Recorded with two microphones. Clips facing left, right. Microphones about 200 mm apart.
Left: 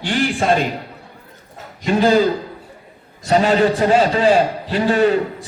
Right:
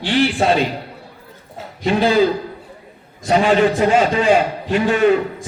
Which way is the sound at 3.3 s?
40° left (ahead or behind).